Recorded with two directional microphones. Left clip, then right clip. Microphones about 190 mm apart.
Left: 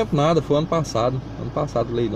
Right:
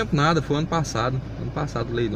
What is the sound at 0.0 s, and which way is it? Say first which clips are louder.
A man's voice: left 2 dB; 30° right (ahead or behind).